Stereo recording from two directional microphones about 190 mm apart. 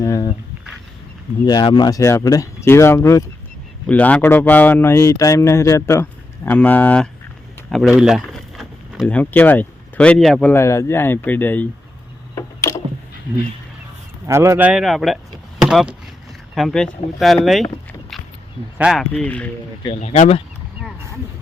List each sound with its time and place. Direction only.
0.0 s speech: 20° left (ahead or behind)
1.5 s a man's voice: 20° left (ahead or behind); by 10.5 s centre (ahead or behind)
10.5 s a man's voice: 15° left (ahead or behind)
12.3 s a sound: 15° left (ahead or behind)
14.3 s speech: 15° right (ahead or behind)
18.8 s a man's voice: centre (ahead or behind)
20.0 s speech: 40° left (ahead or behind)